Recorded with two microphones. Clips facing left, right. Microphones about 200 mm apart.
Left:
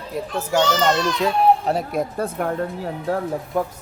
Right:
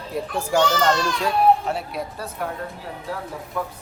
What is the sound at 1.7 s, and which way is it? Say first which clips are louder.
Speech: left 5 dB; 45° left (ahead or behind).